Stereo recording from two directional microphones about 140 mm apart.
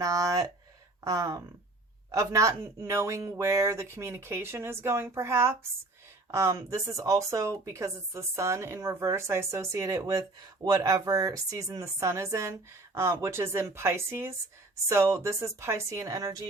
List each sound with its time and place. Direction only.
0.0 s speech: 25° right (ahead or behind)